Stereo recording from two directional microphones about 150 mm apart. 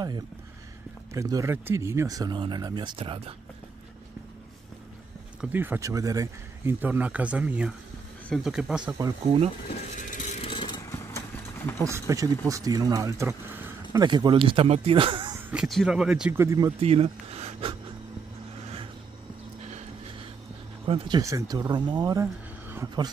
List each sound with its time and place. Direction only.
1.1 s speech: 20° right (ahead or behind); by 3.3 s 40° right (ahead or behind)
5.4 s speech: 10° right (ahead or behind)
9.8 s a sound: 60° left (ahead or behind)
10.4 s vehicle: 35° left (ahead or behind)
10.9 s horse: 20° left (ahead or behind)
11.8 s speech: 20° right (ahead or behind)
14.0 s speech: 30° right (ahead or behind)
15.5 s speech: centre (ahead or behind)
16.3 s speech: 20° right (ahead or behind)
16.8 s speech: 40° right (ahead or behind)
20.8 s speech: 35° right (ahead or behind)
21.2 s speech: 20° right (ahead or behind)
22.2 s a sound: 15° right (ahead or behind)